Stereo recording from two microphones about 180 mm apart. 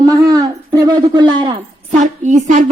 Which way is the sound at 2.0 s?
45° right (ahead or behind).